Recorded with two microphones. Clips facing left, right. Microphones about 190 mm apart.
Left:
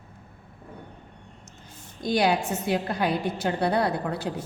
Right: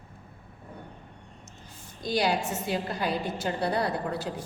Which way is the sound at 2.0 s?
60° left (ahead or behind).